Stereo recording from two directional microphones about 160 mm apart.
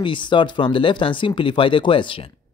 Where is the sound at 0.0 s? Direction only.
30° left (ahead or behind).